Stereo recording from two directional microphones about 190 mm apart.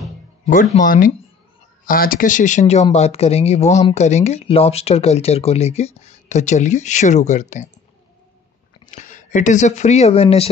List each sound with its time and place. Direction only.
0.7 s speech: 45° left (ahead or behind)
8.9 s speech: 40° left (ahead or behind)